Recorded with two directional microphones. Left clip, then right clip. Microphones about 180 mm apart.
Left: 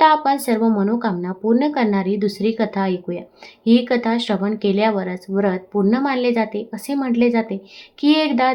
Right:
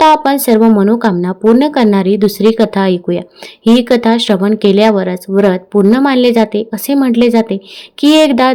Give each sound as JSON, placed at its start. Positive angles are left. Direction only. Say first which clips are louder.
{"t": 0.0, "sound": "speech", "louder": "right 6 dB", "side_deg": -40}